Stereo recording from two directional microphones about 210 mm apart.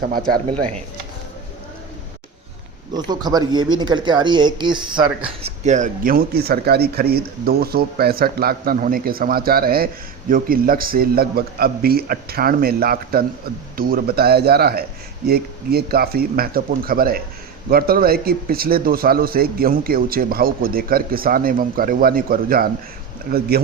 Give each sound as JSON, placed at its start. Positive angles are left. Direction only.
{"t": 2.9, "sound": "speech", "side_deg": -20}